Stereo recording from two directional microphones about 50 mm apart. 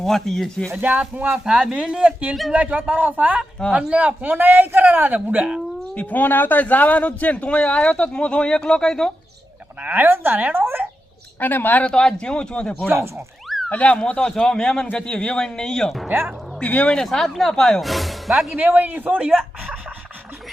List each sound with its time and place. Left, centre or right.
0.0 s speech: centre
0.8 s a man's voice: right
1.5 s speech: centre
2.5 s a man's voice: right
5.9 s a man's voice: left; by 9.1 s centre
9.8 s a man's voice: right
11.3 s speech: left
11.8 s speech: centre
13.7 s speech: left; by 16.0 s centre
16.6 s a man's voice: left
17.0 s speech: centre
18.5 s a man's voice: right